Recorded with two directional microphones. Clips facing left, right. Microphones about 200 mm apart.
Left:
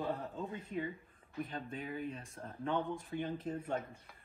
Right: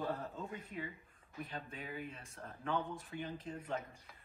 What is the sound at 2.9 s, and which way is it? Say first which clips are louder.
Speech: left 5 dB; 45° left (ahead or behind).